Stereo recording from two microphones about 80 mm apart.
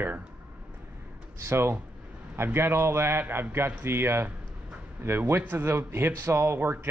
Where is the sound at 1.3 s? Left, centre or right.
Right.